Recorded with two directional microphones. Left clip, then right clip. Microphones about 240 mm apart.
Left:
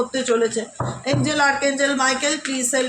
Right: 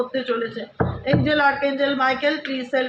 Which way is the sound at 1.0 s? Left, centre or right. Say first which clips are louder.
Even; left.